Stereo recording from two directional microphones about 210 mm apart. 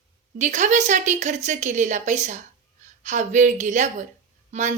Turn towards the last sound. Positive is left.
turn(degrees=-35)  # may be behind; listen again after turning